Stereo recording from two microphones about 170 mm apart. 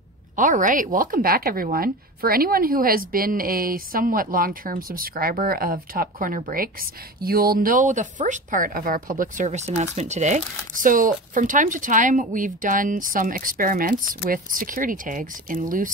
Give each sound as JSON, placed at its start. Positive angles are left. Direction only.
{"t": 0.4, "sound": "speech", "side_deg": -50}